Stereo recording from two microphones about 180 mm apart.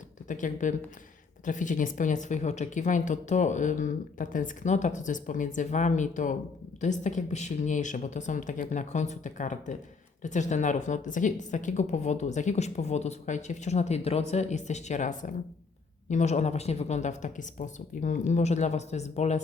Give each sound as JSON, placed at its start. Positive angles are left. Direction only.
{"t": 0.3, "sound": "a woman's voice", "side_deg": 45}